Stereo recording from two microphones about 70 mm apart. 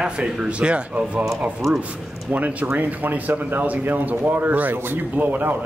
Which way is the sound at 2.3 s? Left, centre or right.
Right.